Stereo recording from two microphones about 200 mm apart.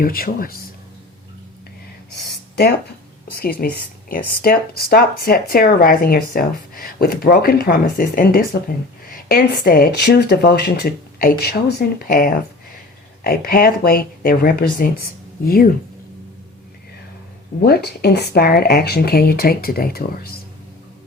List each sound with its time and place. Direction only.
0.0 s speech: 45° left (ahead or behind)
2.1 s a sound: 55° left (ahead or behind)
3.6 s speech: 50° left (ahead or behind)
17.6 s speech: 55° left (ahead or behind)